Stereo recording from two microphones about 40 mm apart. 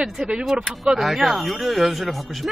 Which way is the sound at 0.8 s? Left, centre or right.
Centre.